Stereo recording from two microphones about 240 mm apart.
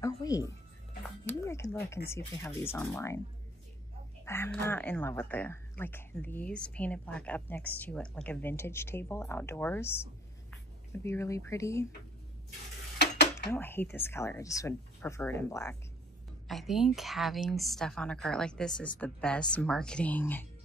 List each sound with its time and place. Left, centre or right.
0.0 s speech: centre
4.2 s speech: centre
13.0 s a sound: left
13.5 s speech: centre
16.4 s a woman's voice: centre